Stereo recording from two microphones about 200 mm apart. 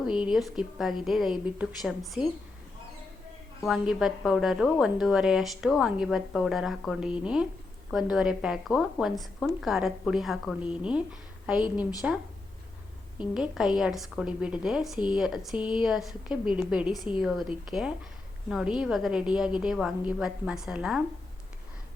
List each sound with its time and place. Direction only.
0.0 s a woman's voice: 5° right (ahead or behind)
3.6 s a woman's voice: centre (ahead or behind)
13.3 s a woman's voice: 5° right (ahead or behind)
17.0 s a woman's voice: 25° left (ahead or behind)
17.7 s a woman's voice: centre (ahead or behind)